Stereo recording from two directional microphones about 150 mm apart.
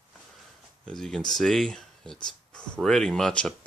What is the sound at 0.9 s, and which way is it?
Speech, 5° left (ahead or behind).